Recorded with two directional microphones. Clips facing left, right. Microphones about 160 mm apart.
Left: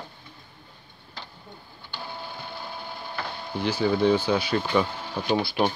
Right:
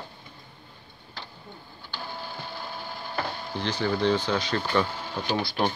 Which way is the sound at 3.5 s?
10° left (ahead or behind).